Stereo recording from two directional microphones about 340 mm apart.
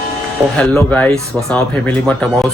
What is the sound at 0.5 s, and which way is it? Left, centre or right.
Speech, centre.